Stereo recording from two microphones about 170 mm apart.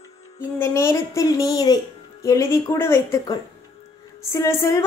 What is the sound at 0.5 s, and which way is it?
A woman's voice, 15° left (ahead or behind).